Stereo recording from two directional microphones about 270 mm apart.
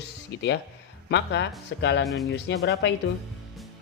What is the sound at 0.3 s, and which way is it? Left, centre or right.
Speech, left.